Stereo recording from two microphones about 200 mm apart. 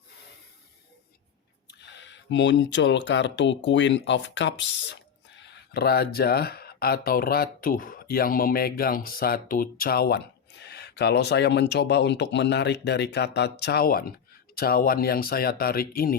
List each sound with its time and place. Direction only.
1.6 s speech: 60° left (ahead or behind)